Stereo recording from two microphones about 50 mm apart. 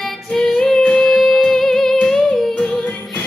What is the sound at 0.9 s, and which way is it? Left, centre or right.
Music, centre.